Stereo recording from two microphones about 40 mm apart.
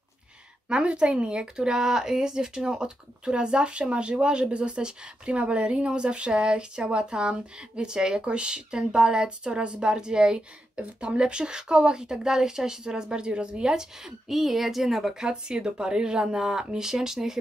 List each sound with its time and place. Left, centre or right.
0.7 s speech: right; by 15.2 s centre
15.2 s speech: right